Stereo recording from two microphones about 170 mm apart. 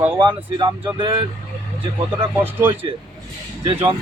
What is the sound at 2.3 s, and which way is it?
Speech, 15° right (ahead or behind).